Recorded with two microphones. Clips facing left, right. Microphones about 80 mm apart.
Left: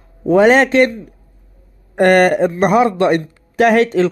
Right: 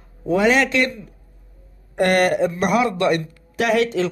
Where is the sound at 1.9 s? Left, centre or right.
Left.